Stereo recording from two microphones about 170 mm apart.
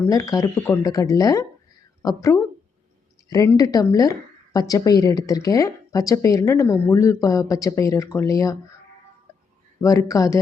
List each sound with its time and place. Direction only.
0.0 s a woman's voice: 20° left (ahead or behind)
9.8 s a woman's voice: 20° left (ahead or behind)